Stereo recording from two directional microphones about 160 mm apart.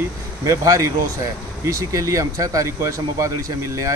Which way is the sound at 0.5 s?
20° right (ahead or behind).